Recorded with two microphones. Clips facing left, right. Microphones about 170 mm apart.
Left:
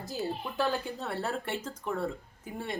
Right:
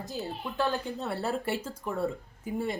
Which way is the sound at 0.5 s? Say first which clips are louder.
Right 2 dB; 15° left (ahead or behind).